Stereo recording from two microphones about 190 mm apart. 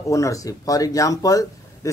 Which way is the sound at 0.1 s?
15° left (ahead or behind).